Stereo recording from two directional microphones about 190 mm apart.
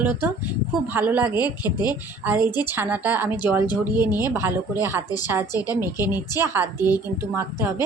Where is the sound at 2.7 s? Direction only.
10° right (ahead or behind).